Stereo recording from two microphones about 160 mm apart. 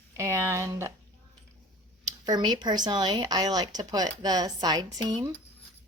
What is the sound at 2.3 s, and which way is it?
Speech, 25° right (ahead or behind).